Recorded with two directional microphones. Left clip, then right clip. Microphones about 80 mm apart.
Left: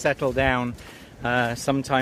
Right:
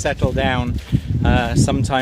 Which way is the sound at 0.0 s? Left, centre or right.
Right.